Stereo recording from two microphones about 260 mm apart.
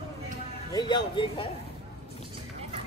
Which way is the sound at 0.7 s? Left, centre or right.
Centre.